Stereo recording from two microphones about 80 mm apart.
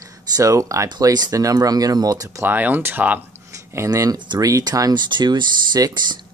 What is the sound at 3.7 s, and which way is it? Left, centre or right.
Speech, right.